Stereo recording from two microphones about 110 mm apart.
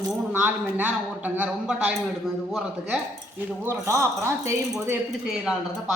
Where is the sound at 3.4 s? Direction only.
15° right (ahead or behind).